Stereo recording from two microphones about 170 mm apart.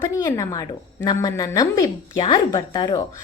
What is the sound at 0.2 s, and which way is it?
Speech, 20° left (ahead or behind).